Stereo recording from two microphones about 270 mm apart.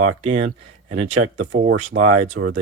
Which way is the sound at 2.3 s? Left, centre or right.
Right.